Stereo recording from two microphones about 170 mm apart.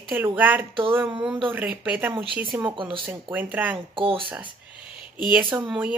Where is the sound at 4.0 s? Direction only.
30° right (ahead or behind).